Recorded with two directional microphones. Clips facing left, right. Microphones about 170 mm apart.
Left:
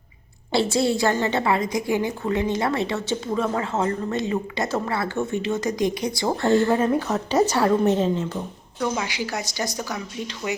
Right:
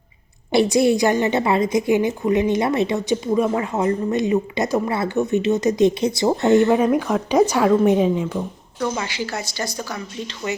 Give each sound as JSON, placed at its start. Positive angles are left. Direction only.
{"t": 0.5, "sound": "a woman's voice", "side_deg": -15}
{"t": 9.0, "sound": "speech", "side_deg": 15}